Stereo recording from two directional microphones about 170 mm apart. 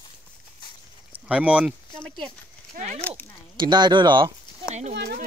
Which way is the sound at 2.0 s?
5° left (ahead or behind).